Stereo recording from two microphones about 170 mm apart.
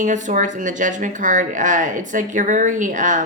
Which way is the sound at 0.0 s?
45° right (ahead or behind).